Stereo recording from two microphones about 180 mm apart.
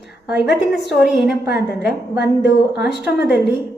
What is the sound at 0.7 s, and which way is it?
Speech, centre (ahead or behind).